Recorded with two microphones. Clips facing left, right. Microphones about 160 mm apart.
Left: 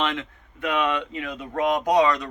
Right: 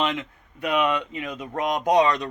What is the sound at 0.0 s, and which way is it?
Speech, 15° right (ahead or behind).